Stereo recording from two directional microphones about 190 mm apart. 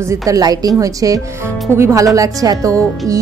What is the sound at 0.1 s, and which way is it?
Speech, 20° right (ahead or behind).